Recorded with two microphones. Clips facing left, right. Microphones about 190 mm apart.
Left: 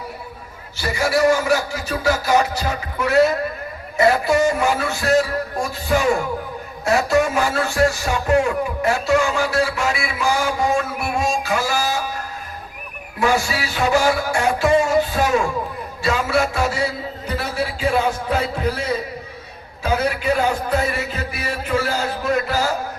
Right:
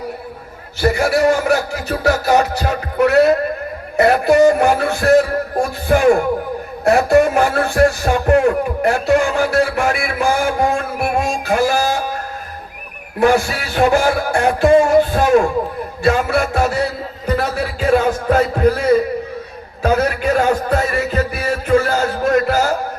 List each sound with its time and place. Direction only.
0.8 s music: 60° right (ahead or behind)
13.1 s music: 55° right (ahead or behind)
17.2 s a man's voice: 55° right (ahead or behind)
19.8 s music: 55° right (ahead or behind)